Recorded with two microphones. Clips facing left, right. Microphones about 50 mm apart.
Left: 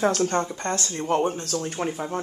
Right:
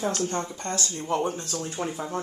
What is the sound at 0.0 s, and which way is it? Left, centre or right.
Speech, left.